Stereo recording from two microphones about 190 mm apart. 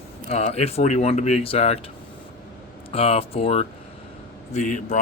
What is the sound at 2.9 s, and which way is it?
Speech, 30° left (ahead or behind).